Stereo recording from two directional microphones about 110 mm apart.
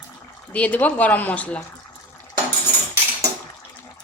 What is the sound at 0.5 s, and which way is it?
Speech, 15° left (ahead or behind).